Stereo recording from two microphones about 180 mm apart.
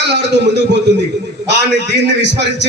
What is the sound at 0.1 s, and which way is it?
Speech, 75° right (ahead or behind).